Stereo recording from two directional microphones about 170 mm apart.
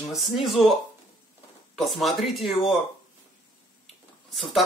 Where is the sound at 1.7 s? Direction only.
Centre (ahead or behind).